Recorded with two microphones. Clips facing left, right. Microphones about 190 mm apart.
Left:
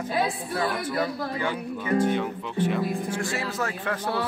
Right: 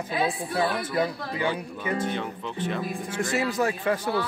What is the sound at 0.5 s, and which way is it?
Speech, 15° right (ahead or behind).